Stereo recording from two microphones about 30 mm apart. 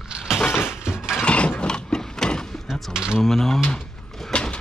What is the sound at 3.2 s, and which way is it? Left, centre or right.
Speech, centre.